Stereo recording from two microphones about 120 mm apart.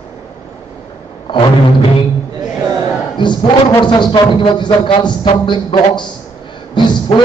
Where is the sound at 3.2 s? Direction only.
40° left (ahead or behind).